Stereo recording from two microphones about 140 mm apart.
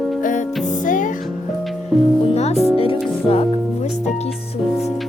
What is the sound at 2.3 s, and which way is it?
Music, 50° left (ahead or behind).